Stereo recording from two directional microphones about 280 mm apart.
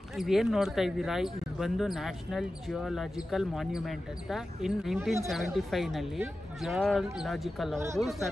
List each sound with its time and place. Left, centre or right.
0.1 s speech: centre